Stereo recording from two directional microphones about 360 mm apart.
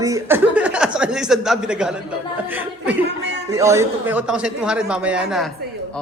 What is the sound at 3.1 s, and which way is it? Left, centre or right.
Speech, right.